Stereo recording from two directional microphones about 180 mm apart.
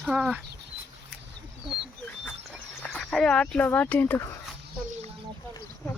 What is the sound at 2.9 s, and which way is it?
Speech, 5° left (ahead or behind).